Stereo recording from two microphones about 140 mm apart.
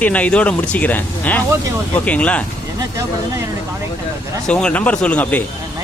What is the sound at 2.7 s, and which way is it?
Speech, 20° right (ahead or behind).